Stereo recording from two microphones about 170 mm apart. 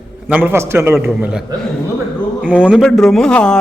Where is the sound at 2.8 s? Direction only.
5° left (ahead or behind).